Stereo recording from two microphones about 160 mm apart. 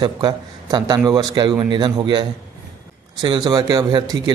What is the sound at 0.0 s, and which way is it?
A man's voice, 25° right (ahead or behind).